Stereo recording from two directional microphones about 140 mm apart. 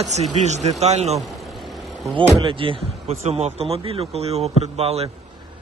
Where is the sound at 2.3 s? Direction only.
35° right (ahead or behind).